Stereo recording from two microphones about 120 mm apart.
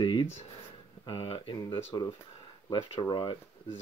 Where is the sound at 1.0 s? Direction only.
50° left (ahead or behind).